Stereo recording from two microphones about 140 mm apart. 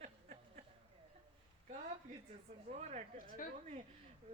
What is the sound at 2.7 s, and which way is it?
Speech, 55° right (ahead or behind).